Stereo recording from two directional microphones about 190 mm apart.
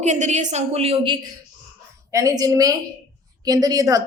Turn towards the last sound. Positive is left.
turn(degrees=-20)  # may be behind; listen again after turning